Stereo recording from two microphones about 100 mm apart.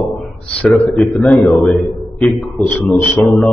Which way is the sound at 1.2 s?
15° left (ahead or behind).